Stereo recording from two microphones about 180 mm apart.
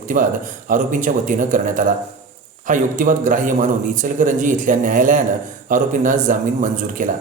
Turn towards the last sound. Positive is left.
turn(degrees=-45)  # may be behind; listen again after turning